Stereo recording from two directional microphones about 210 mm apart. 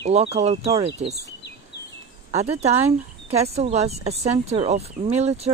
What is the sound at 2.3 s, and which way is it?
Speech, 30° right (ahead or behind).